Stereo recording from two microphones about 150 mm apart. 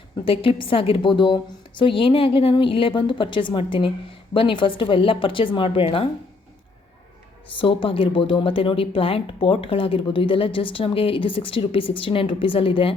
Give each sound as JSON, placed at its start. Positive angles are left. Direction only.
{"t": 0.3, "sound": "a woman's voice", "side_deg": 35}
{"t": 7.5, "sound": "a woman's voice", "side_deg": 35}